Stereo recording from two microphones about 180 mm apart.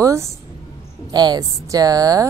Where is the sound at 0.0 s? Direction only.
15° right (ahead or behind).